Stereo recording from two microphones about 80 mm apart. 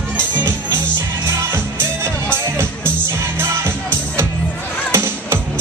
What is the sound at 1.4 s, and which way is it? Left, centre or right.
Music, right.